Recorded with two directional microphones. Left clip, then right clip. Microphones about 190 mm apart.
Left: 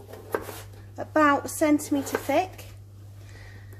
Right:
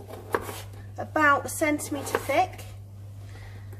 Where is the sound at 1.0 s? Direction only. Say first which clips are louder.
Even; 20° left (ahead or behind).